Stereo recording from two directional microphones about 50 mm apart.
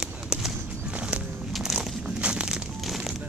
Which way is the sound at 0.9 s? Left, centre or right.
Right.